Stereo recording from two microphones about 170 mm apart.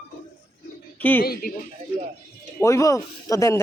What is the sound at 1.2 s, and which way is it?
Speech, 60° left (ahead or behind).